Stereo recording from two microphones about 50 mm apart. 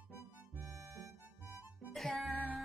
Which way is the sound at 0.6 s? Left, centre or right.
Right.